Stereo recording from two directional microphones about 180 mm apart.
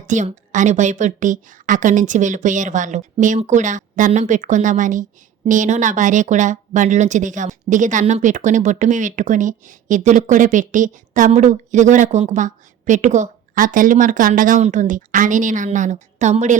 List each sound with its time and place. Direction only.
0.0 s speech: 40° right (ahead or behind)